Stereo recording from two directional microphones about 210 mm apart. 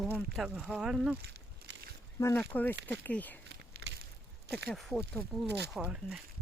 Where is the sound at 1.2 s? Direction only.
50° right (ahead or behind).